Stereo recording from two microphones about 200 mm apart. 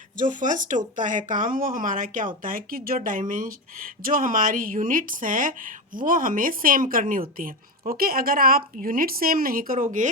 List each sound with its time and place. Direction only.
0.2 s speech: 40° right (ahead or behind)